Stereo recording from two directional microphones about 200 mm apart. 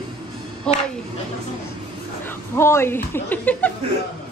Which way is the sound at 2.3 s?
10° left (ahead or behind).